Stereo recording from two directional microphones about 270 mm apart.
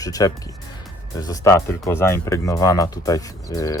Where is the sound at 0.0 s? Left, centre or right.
Centre.